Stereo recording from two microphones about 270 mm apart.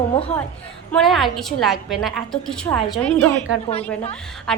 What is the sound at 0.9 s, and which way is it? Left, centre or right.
A woman's voice, centre.